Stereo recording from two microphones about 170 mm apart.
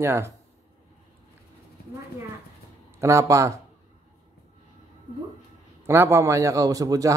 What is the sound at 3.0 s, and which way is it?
Speech, 15° right (ahead or behind).